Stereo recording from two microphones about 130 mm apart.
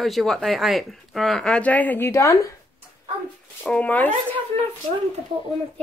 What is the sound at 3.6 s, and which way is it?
Speech, 10° left (ahead or behind).